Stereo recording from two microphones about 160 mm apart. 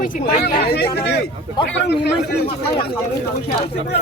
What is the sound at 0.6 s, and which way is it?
Speech, 90° left.